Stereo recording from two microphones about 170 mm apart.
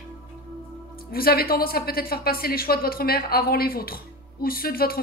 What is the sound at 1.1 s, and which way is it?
A woman's voice, 60° left (ahead or behind).